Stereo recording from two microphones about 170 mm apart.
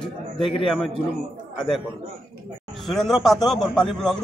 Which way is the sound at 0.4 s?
30° left (ahead or behind).